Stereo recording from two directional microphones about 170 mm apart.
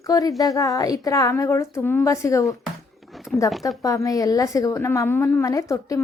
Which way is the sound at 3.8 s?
20° left (ahead or behind).